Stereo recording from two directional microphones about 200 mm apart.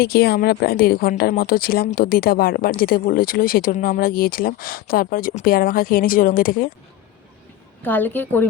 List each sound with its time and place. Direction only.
0.0 s a woman's voice: 50° left (ahead or behind)
7.8 s a woman's voice: 10° left (ahead or behind)